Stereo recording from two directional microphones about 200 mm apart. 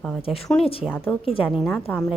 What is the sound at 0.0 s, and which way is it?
Speech, 5° left (ahead or behind).